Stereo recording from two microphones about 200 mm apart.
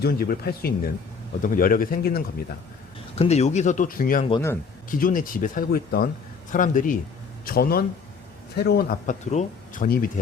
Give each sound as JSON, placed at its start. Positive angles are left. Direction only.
{"t": 0.0, "sound": "speech", "side_deg": 50}
{"t": 3.2, "sound": "speech", "side_deg": 35}
{"t": 4.3, "sound": "speech", "side_deg": 15}
{"t": 4.9, "sound": "a man's voice", "side_deg": 45}
{"t": 9.0, "sound": "speech", "side_deg": 35}